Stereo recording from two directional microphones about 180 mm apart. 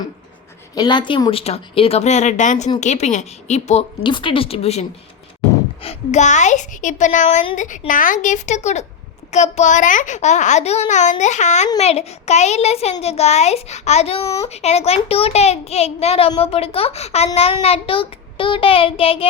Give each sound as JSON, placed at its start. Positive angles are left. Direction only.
{"t": 0.8, "sound": "a child's voice", "side_deg": 25}